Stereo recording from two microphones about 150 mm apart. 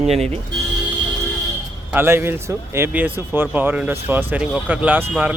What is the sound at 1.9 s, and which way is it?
Speech, 15° right (ahead or behind).